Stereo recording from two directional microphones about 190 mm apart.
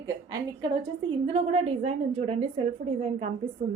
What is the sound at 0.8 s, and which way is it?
A woman's voice, 30° right (ahead or behind).